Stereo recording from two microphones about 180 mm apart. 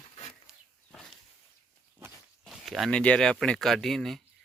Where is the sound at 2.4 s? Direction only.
Centre (ahead or behind).